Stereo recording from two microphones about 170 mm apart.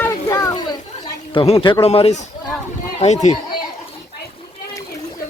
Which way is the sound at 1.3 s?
35° left (ahead or behind).